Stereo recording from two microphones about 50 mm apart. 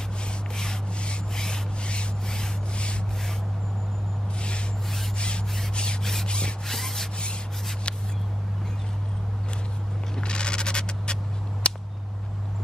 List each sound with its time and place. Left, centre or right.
0.6 s rub: centre
4.4 s rub: left
5.8 s rub: centre
6.7 s rub: centre
7.9 s spray: left
10.1 s a sound: centre